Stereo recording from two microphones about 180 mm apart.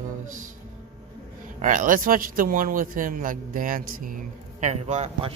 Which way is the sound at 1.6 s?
45° right (ahead or behind).